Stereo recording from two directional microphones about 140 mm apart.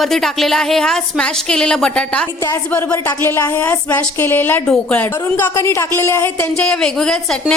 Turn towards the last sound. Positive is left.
turn(degrees=5)  # may be behind; listen again after turning